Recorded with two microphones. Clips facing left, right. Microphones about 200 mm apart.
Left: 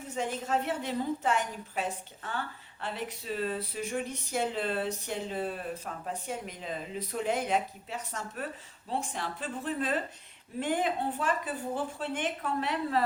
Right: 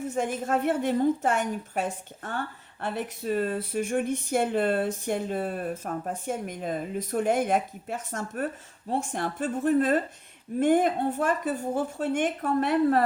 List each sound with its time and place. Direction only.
0.1 s speech: 50° right (ahead or behind)